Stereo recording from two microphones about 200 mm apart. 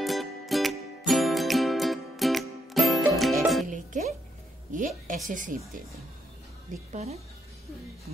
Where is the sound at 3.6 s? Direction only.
40° right (ahead or behind).